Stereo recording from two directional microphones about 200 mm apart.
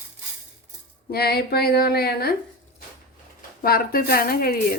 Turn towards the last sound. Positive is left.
turn(degrees=45)  # may be behind; listen again after turning